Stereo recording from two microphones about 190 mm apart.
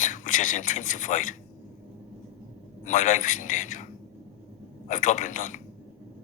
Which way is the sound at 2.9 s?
40° left (ahead or behind).